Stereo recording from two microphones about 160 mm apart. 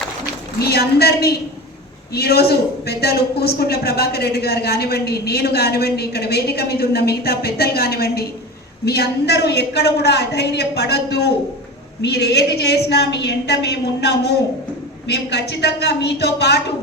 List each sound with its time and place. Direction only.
0.6 s a woman's voice: 80° left
8.8 s a woman's voice: 90° left
12.6 s a woman's voice: 90° left